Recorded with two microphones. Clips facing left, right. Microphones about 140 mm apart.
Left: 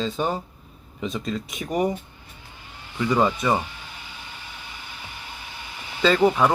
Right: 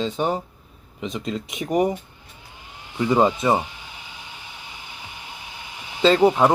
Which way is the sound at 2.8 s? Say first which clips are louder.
Right 3 dB; 20° right (ahead or behind).